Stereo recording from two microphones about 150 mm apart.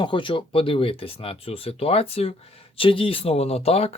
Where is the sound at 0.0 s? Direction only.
35° left (ahead or behind).